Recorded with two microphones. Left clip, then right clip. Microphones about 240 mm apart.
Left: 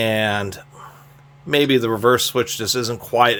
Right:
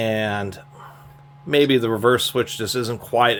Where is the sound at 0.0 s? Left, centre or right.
Centre.